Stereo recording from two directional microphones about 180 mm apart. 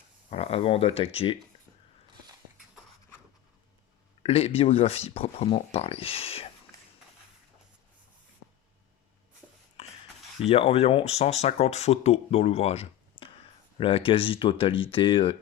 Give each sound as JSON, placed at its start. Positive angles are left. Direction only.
{"t": 0.3, "sound": "speech", "side_deg": 35}
{"t": 4.2, "sound": "speech", "side_deg": 35}
{"t": 6.7, "sound": "a sound", "side_deg": 15}
{"t": 9.8, "sound": "rub", "side_deg": 35}
{"t": 10.5, "sound": "speech", "side_deg": 35}